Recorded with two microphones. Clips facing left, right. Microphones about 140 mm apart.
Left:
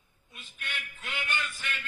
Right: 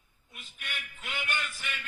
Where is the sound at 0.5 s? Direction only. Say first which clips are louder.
Left 2 dB; 10° right (ahead or behind).